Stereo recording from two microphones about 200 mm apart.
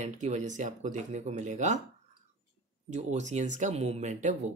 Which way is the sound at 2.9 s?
35° right (ahead or behind).